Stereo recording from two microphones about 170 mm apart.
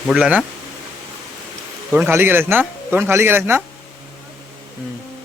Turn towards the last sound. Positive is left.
turn(degrees=-15)  # may be behind; listen again after turning